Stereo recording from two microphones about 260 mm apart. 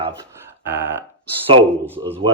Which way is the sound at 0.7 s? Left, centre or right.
Centre.